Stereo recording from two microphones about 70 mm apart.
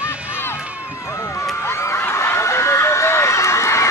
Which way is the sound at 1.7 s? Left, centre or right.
Left.